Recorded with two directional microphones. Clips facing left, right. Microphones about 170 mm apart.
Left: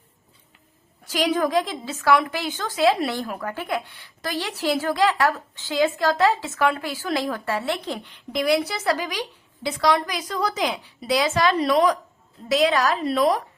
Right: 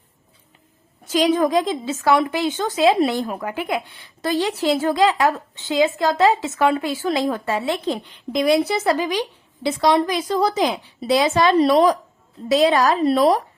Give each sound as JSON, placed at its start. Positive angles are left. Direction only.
{"t": 1.0, "sound": "a woman's voice", "side_deg": -20}
{"t": 4.2, "sound": "a woman's voice", "side_deg": -25}